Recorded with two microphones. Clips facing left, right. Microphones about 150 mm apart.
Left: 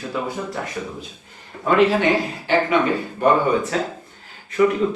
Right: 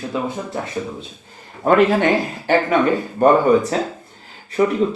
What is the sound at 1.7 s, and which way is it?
Speech, 45° right (ahead or behind).